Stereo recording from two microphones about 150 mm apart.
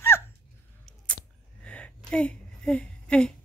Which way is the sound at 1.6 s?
5° left (ahead or behind).